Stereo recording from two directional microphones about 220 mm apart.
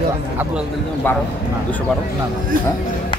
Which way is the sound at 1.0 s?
10° left (ahead or behind).